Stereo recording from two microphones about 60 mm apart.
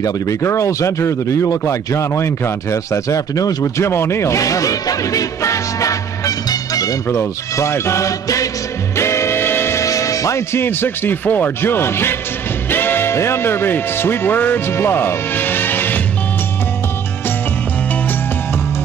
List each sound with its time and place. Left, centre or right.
0.4 s speech: left
7.1 s speech: left
8.9 s music: left
9.8 s music: left
10.5 s speech: left